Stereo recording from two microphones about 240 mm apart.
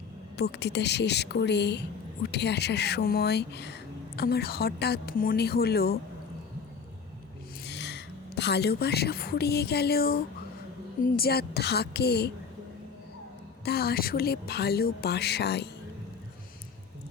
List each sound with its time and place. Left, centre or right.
0.3 s speech: left
7.7 s a woman's voice: left
13.7 s speech: left